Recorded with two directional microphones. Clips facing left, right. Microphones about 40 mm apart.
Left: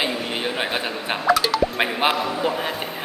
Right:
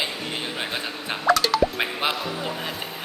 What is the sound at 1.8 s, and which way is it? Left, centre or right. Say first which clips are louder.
A man's voice: left 5 dB; left.